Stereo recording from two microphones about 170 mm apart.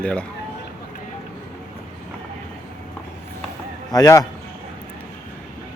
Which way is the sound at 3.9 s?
20° left (ahead or behind).